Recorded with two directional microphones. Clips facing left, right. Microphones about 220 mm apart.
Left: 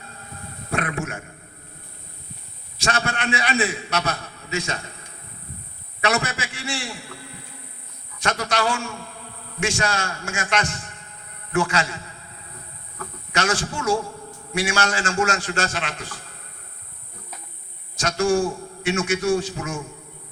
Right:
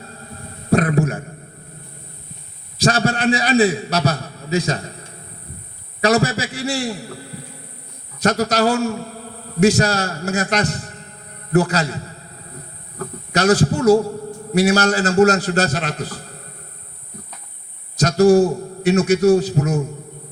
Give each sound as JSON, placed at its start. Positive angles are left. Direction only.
{"t": 0.7, "sound": "a sound", "side_deg": -35}
{"t": 2.7, "sound": "a man's voice", "side_deg": -35}
{"t": 17.9, "sound": "a man's voice", "side_deg": -40}